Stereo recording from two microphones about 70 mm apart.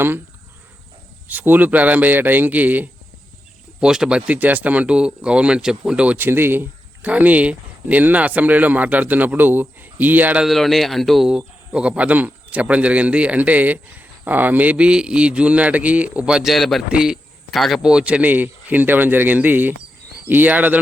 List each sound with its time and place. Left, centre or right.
1.3 s speech: right
3.8 s speech: centre
6.1 s speech: right
10.4 s a man's voice: centre
11.3 s speech: centre
16.5 s a man's voice: centre
16.9 s speech: centre
17.5 s a man's voice: centre
17.8 s speech: centre